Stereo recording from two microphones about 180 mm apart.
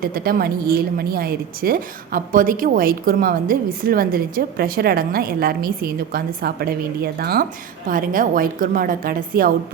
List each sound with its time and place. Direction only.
0.0 s a woman's voice: 55° right (ahead or behind)